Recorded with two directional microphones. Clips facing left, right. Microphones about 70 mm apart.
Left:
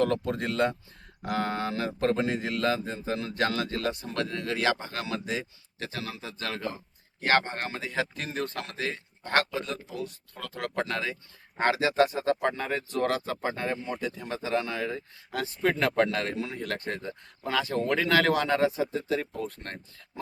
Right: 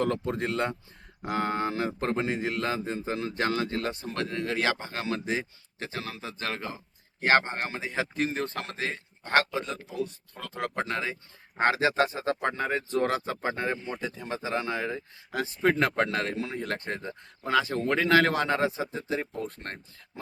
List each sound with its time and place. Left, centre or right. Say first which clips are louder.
0.0 s speech: left 1 dB; right
13.7 s speech: left 2 dB; centre
14.3 s speech: even; right
19.5 s speech: right 1 dB; right